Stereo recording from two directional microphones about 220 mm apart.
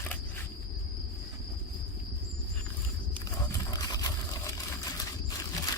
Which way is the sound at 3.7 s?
15° left (ahead or behind).